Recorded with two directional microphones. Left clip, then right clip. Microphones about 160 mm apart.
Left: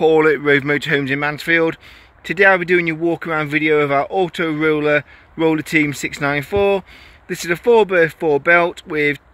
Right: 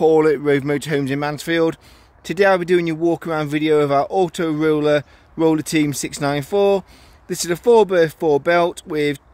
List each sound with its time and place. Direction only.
0.0 s speech: 25° right (ahead or behind)